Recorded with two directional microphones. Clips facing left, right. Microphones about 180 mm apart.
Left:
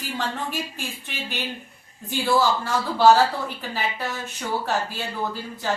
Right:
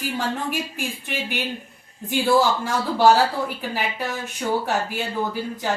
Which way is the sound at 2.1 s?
15° right (ahead or behind).